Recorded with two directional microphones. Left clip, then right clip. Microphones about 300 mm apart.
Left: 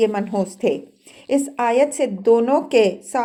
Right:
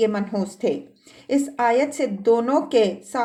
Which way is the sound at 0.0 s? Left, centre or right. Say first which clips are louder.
Left 3 dB; left.